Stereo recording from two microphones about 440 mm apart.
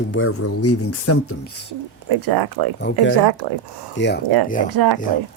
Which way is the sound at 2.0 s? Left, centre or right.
Right.